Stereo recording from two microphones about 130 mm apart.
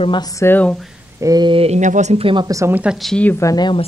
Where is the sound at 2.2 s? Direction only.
35° right (ahead or behind).